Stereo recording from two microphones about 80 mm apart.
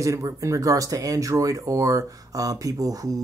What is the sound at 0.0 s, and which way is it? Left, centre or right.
Speech, right.